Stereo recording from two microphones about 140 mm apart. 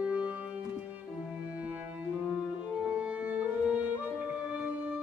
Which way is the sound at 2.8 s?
10° right (ahead or behind).